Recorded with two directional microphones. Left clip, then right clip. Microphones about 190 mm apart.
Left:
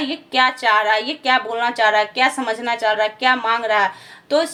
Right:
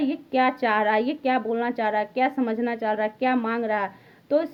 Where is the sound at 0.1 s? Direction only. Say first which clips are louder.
Left 9 dB; 45° right (ahead or behind).